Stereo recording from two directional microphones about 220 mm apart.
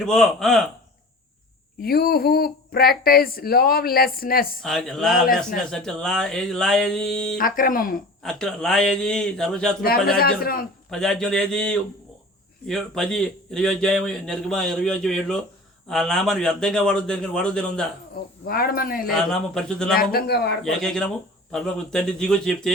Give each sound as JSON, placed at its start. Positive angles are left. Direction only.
{"t": 0.0, "sound": "a man's voice", "side_deg": 0}
{"t": 1.8, "sound": "speech", "side_deg": 45}
{"t": 4.6, "sound": "a man's voice", "side_deg": 0}
{"t": 7.3, "sound": "speech", "side_deg": 40}
{"t": 8.2, "sound": "a man's voice", "side_deg": 0}
{"t": 9.8, "sound": "speech", "side_deg": 45}
{"t": 10.9, "sound": "a man's voice", "side_deg": 0}
{"t": 18.4, "sound": "speech", "side_deg": 45}
{"t": 19.1, "sound": "a man's voice", "side_deg": 0}
{"t": 20.0, "sound": "speech", "side_deg": 45}
{"t": 20.7, "sound": "a man's voice", "side_deg": 5}